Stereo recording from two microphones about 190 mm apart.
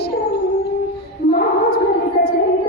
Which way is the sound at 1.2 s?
55° left (ahead or behind).